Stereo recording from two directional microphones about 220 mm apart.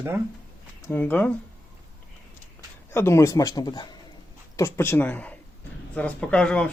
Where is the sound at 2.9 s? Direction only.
10° left (ahead or behind).